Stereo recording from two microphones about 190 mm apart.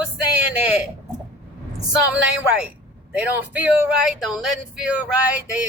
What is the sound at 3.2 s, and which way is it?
Speech, 10° right (ahead or behind).